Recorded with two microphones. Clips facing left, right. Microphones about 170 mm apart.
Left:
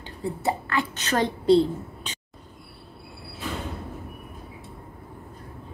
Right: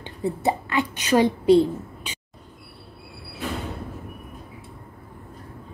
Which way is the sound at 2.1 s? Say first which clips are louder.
Right 1 dB; 10° right (ahead or behind).